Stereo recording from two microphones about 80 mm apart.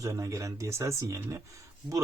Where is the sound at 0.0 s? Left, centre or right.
Right.